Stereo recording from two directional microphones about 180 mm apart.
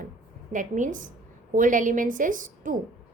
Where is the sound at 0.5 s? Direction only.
45° right (ahead or behind).